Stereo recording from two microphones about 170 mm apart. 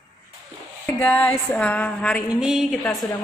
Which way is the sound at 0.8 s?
10° left (ahead or behind).